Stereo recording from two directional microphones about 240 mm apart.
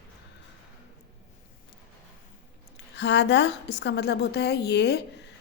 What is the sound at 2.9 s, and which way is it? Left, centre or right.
A woman's voice, left.